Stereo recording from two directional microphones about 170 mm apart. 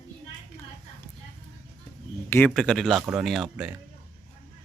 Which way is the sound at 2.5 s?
5° left (ahead or behind).